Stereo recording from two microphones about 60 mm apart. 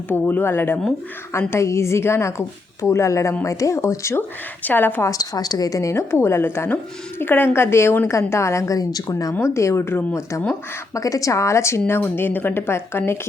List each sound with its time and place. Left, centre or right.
0.1 s speech: left
1.3 s a woman's voice: left
4.6 s speech: left
5.0 s a woman's voice: left
9.4 s a woman's voice: left
10.5 s a woman's voice: left
11.9 s speech: left